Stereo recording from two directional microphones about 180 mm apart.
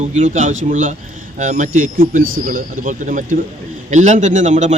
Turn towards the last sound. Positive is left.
turn(degrees=-40)  # may be behind; listen again after turning